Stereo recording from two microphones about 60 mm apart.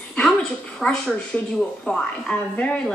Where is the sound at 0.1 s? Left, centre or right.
Centre.